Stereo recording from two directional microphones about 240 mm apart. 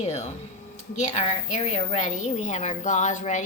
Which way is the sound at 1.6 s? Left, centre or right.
Left.